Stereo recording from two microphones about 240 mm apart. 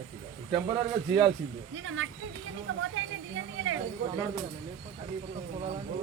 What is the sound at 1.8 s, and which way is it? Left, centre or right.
Speech, right.